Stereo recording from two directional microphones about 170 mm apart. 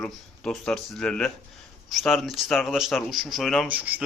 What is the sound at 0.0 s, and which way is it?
A man's voice, 5° left (ahead or behind).